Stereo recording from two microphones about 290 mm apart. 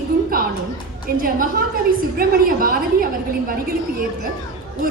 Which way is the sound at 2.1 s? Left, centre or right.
Right.